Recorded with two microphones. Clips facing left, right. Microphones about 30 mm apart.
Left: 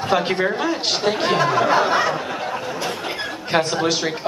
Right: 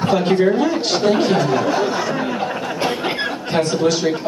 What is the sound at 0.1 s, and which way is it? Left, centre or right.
A man's voice, centre.